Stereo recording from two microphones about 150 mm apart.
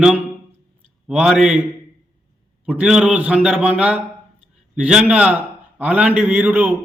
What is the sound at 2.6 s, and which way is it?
A man's voice, 5° right (ahead or behind).